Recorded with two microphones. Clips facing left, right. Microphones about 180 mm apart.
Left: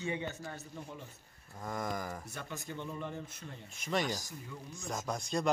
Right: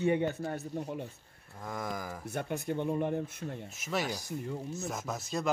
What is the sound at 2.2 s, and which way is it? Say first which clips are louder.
Speech: right 9 dB; 60° right (ahead or behind).